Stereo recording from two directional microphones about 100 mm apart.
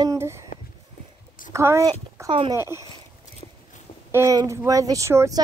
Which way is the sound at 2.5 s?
25° right (ahead or behind).